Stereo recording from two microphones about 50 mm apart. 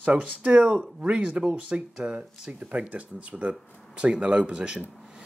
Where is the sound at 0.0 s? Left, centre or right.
Right.